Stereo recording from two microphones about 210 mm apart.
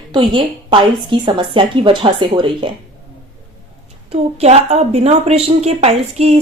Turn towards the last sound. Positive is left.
turn(degrees=-30)  # may be behind; listen again after turning